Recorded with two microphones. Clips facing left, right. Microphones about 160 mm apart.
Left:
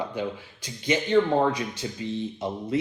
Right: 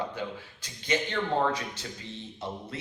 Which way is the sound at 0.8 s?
15° left (ahead or behind).